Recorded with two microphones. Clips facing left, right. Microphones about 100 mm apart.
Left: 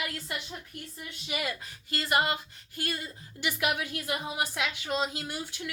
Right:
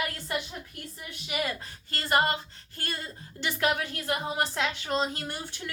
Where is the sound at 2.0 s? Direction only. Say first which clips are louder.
Right 2 dB; 35° right (ahead or behind).